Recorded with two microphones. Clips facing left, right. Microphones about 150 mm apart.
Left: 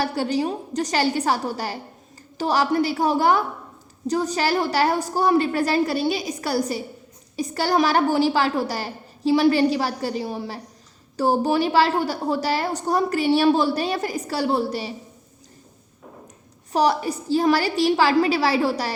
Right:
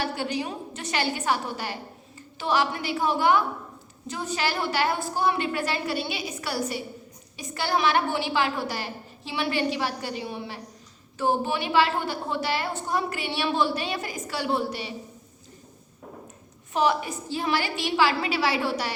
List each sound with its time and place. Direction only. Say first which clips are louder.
0.0 s a woman's voice: left 6 dB; 35° left (ahead or behind)
16.7 s a woman's voice: left 4 dB; 40° left (ahead or behind)